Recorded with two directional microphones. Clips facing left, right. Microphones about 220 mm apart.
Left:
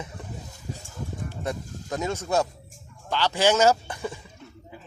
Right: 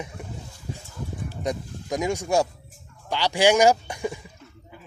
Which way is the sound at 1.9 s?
15° right (ahead or behind).